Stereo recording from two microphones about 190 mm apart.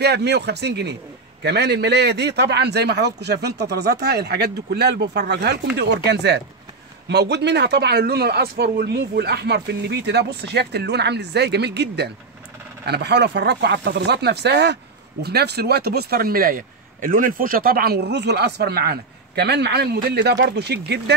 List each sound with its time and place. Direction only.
0.0 s speech: 60° right (ahead or behind)